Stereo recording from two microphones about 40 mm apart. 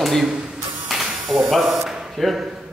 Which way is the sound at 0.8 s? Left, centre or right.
Centre.